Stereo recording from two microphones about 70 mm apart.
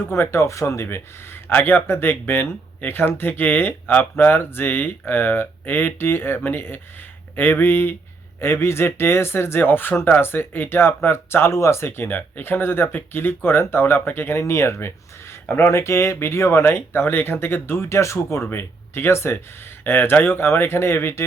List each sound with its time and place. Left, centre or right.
0.0 s speech: left